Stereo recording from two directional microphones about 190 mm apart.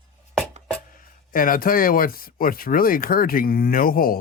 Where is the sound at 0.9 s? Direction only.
45° left (ahead or behind).